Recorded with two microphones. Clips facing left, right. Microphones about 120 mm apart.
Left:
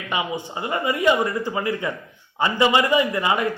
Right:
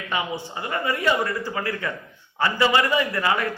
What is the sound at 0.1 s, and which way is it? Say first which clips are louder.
A man's voice: left 2 dB; 15° left (ahead or behind).